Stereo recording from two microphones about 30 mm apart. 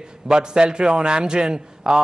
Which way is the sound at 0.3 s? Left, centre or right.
Right.